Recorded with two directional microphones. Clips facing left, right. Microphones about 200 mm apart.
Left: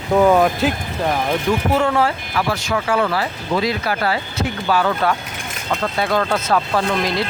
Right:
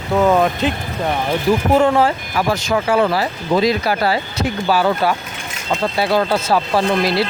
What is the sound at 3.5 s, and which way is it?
Speech, 35° right (ahead or behind).